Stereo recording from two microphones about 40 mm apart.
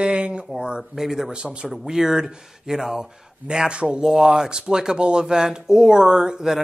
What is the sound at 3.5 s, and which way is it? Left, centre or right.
Speech, right.